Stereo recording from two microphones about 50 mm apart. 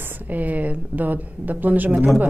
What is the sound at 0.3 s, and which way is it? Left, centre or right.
Speech, right.